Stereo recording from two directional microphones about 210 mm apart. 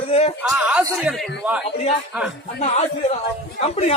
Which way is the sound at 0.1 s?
30° left (ahead or behind).